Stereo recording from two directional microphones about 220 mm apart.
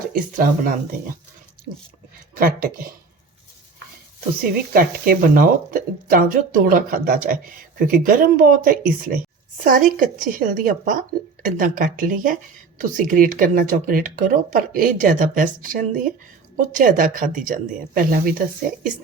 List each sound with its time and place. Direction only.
0.1 s speech: 40° right (ahead or behind)
2.3 s speech: 40° right (ahead or behind)
4.7 s speech: 40° right (ahead or behind)